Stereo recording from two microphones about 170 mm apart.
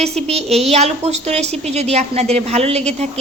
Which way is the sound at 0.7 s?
40° right (ahead or behind).